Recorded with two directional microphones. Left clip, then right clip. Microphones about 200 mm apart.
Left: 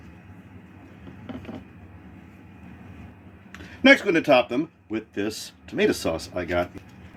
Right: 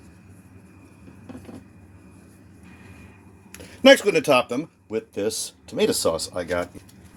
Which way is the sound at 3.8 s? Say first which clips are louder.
Right 3 dB; 40° right (ahead or behind).